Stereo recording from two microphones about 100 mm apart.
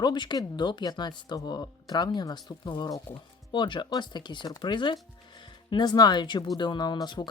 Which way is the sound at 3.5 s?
55° left (ahead or behind).